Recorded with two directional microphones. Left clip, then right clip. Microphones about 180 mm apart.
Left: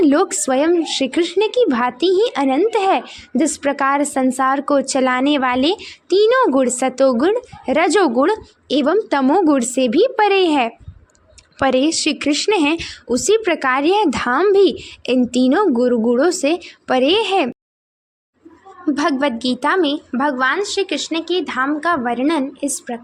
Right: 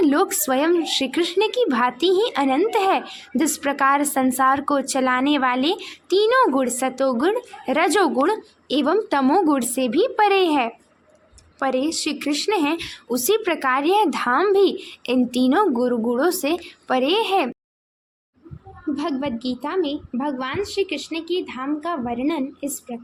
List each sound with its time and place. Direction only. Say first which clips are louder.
0.0 s a woman's voice: left 4 dB; 35° left (ahead or behind)
18.9 s a woman's voice: left 8 dB; 30° left (ahead or behind)